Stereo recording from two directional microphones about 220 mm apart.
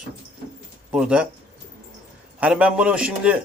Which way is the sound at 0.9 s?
5° right (ahead or behind).